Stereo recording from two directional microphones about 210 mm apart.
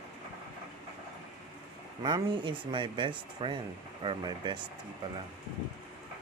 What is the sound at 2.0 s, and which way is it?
Speech, 20° right (ahead or behind).